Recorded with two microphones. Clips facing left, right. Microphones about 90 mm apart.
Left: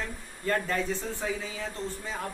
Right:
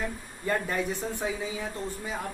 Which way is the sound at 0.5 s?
15° right (ahead or behind).